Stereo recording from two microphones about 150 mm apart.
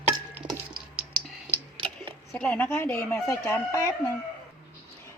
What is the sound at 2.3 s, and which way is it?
A woman's voice, 10° left (ahead or behind).